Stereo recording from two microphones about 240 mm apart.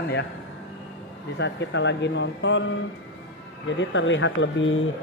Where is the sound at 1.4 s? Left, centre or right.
Left.